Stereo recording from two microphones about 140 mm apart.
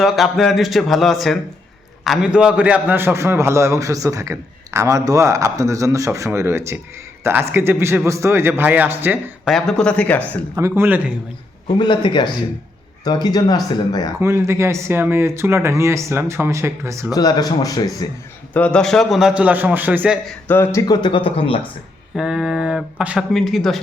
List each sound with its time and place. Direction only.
0.0 s a man's voice: centre (ahead or behind)
9.4 s speech: centre (ahead or behind)
10.2 s a man's voice: 20° right (ahead or behind)
11.8 s speech: 35° left (ahead or behind)
14.2 s a man's voice: 20° right (ahead or behind)
17.2 s speech: 30° left (ahead or behind)
18.5 s a man's voice: 10° left (ahead or behind); by 20.1 s 10° right (ahead or behind)
20.5 s speech: 15° left (ahead or behind)
20.8 s speech: 30° left (ahead or behind)
22.1 s speech: 5° right (ahead or behind)